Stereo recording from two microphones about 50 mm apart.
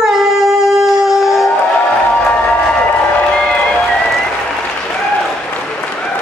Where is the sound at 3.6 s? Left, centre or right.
Centre.